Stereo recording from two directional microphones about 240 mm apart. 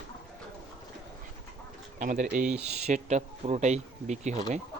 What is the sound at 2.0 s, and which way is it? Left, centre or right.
Speech, right.